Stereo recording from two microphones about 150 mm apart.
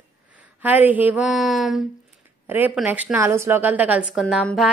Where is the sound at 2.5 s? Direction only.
10° right (ahead or behind).